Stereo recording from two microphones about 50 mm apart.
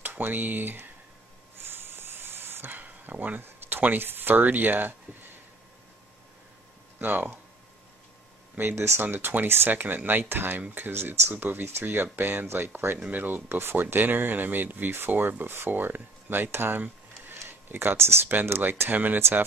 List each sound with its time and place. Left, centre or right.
0.0 s speech: right
1.6 s a sound: right
2.8 s a sound: right
3.4 s speech: right
7.0 s speech: right
8.7 s speech: right
9.0 s speech: right
11.3 s speech: right
17.5 s a sound: right
17.9 s speech: right
18.6 s speech: right
19.1 s speech: right